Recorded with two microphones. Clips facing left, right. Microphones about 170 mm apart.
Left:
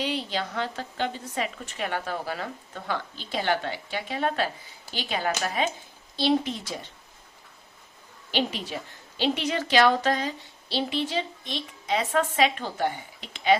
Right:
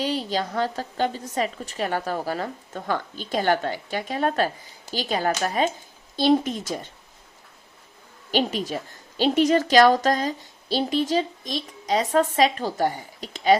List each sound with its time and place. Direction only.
0.0 s a woman's voice: 40° right (ahead or behind)
8.3 s a woman's voice: 45° right (ahead or behind)